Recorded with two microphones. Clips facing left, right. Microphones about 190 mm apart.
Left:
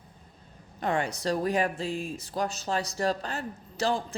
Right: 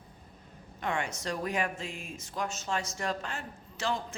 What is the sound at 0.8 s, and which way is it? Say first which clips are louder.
Speech: left 5 dB; 35° left (ahead or behind).